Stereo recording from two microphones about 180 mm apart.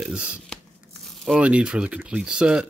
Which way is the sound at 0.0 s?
5° right (ahead or behind).